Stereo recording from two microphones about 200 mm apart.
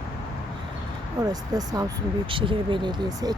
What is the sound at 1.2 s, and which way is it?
Speech, 20° right (ahead or behind).